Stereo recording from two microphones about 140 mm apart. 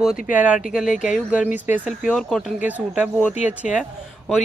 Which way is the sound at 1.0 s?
5° right (ahead or behind).